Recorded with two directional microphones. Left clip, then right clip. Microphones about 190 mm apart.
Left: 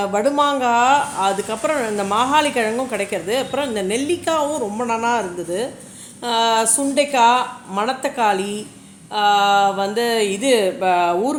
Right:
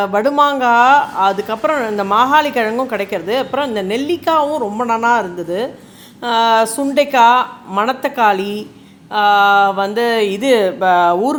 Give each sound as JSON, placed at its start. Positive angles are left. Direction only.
{"t": 0.0, "sound": "speech", "side_deg": -20}